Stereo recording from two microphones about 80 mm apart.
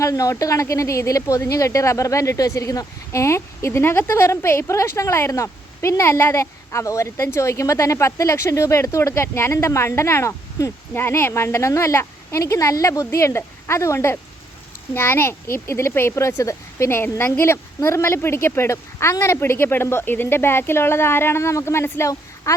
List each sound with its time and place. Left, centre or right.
0.0 s speech: left